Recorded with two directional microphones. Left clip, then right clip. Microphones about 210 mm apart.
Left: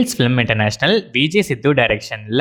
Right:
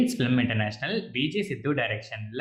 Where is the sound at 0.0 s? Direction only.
40° left (ahead or behind).